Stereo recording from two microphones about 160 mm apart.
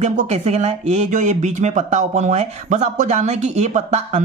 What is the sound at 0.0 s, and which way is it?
Speech, 45° right (ahead or behind).